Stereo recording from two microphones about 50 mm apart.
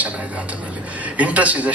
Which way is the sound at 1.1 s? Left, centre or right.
Right.